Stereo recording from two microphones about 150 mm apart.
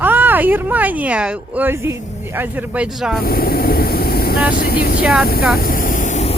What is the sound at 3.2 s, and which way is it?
Speech, 85° left.